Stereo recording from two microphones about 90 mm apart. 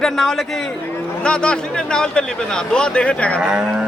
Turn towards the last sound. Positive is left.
turn(degrees=-10)  # may be behind; listen again after turning